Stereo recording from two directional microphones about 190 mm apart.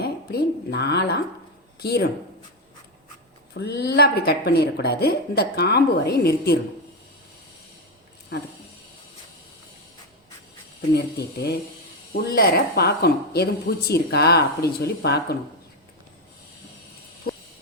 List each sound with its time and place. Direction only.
0.0 s a sound: 60° left (ahead or behind)
1.8 s a woman's voice: 60° left (ahead or behind)
3.5 s a woman's voice: 60° left (ahead or behind)
10.8 s a woman's voice: 60° left (ahead or behind)